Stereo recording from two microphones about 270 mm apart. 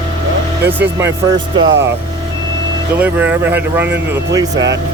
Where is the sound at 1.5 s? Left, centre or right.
Right.